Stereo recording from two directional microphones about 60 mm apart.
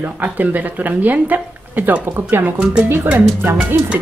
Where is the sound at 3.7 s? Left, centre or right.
Right.